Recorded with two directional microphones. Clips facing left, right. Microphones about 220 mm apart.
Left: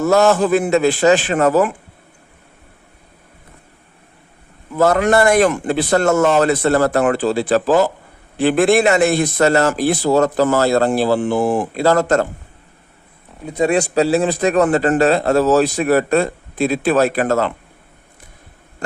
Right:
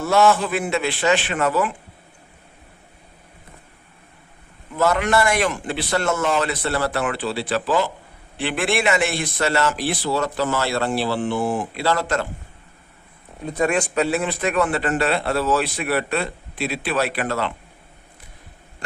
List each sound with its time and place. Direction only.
0.0 s a man's voice: 40° left (ahead or behind)
4.8 s a man's voice: 45° left (ahead or behind)
13.6 s a man's voice: 35° left (ahead or behind)